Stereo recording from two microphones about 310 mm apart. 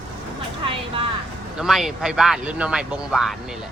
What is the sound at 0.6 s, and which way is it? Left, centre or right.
Speech, centre.